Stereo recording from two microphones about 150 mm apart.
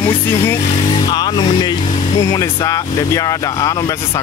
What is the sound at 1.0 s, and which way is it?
Speech, 30° left (ahead or behind).